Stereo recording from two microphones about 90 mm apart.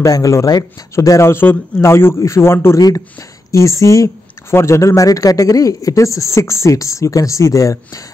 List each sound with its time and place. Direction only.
0.0 s a man's voice: 40° left (ahead or behind)